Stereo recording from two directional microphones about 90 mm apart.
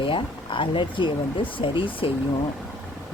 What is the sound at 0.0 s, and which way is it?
Speech, 75° left (ahead or behind).